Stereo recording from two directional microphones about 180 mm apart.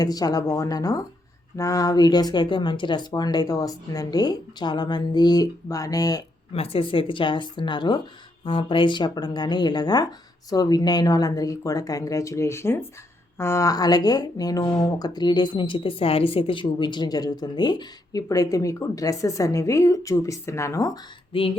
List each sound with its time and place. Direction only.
0.0 s speech: 20° left (ahead or behind)
6.5 s speech: 30° left (ahead or behind)
21.3 s speech: 30° left (ahead or behind)